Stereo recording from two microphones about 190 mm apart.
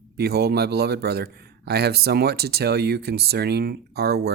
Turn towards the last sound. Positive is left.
turn(degrees=-55)  # may be behind; listen again after turning